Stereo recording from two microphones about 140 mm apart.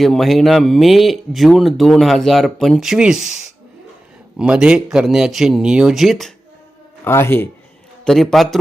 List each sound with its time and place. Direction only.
0.0 s speech: centre (ahead or behind)
7.0 s speech: 15° left (ahead or behind)
8.0 s speech: centre (ahead or behind)